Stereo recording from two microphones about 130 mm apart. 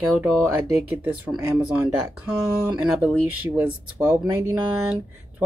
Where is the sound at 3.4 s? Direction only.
15° right (ahead or behind).